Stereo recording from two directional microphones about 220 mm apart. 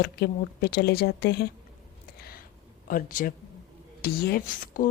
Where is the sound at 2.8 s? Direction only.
40° left (ahead or behind).